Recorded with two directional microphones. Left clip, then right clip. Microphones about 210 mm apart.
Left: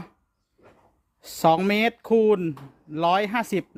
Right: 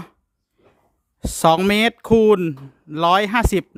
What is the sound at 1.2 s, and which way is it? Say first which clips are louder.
A man's voice: right 4 dB; 25° right (ahead or behind).